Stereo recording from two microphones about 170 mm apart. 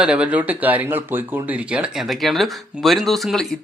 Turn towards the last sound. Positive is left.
turn(degrees=0)  # may be behind; listen again after turning